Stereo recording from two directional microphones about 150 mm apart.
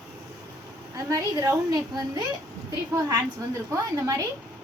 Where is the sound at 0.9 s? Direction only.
25° right (ahead or behind).